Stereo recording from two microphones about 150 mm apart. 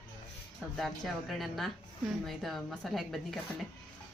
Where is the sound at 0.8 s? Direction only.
Centre (ahead or behind).